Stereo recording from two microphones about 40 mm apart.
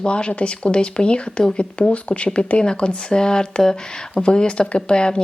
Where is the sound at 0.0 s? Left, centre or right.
Left.